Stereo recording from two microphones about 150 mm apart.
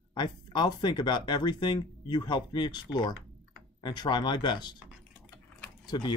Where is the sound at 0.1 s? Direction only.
30° left (ahead or behind).